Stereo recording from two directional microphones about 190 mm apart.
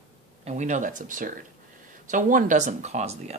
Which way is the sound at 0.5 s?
40° right (ahead or behind).